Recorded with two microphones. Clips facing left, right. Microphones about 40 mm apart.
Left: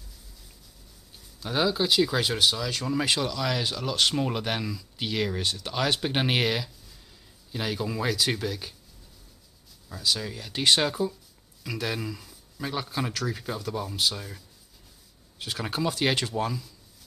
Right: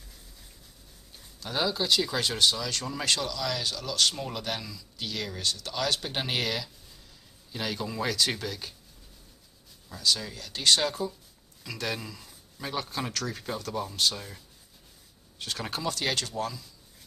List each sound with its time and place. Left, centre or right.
1.4 s speech: centre
7.5 s speech: centre
9.8 s speech: centre
15.9 s speech: left